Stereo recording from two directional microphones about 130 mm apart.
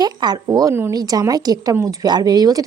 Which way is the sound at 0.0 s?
30° right (ahead or behind).